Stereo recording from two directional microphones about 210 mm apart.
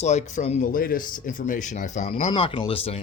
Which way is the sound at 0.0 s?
35° left (ahead or behind).